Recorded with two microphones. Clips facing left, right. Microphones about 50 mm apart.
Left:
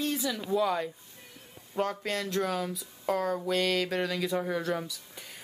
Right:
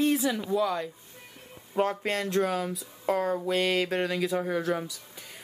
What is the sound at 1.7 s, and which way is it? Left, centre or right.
Speech, centre.